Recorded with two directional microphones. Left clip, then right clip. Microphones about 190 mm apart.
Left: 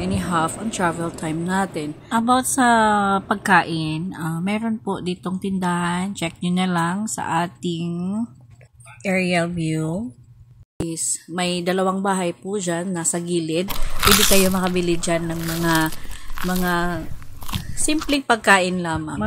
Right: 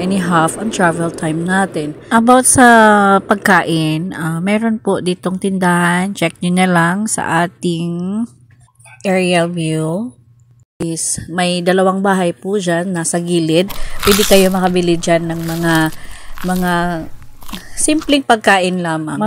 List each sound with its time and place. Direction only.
0.0 s a woman's voice: 35° right (ahead or behind)
13.7 s speech: centre (ahead or behind)
14.8 s a woman's voice: 25° right (ahead or behind)
15.2 s speech: centre (ahead or behind)
15.9 s a sound: centre (ahead or behind)
16.6 s speech: 30° right (ahead or behind)
17.0 s a sound: centre (ahead or behind)
18.1 s a woman's voice: 30° right (ahead or behind)